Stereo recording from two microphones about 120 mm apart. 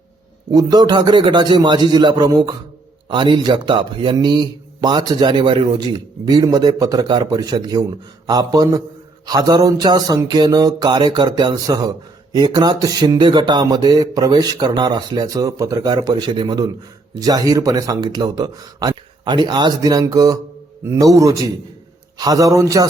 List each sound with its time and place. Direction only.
0.5 s a man's voice: 35° right (ahead or behind)